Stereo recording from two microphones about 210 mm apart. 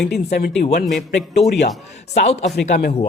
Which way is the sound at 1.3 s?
50° left (ahead or behind).